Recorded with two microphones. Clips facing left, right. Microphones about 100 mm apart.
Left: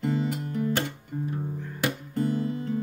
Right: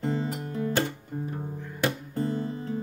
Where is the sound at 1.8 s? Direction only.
30° right (ahead or behind).